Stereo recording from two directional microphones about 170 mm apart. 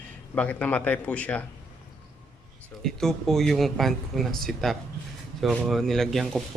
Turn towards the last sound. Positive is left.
turn(degrees=0)  # may be behind; listen again after turning